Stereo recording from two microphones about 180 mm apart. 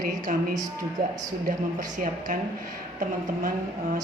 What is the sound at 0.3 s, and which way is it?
Speech, 50° right (ahead or behind).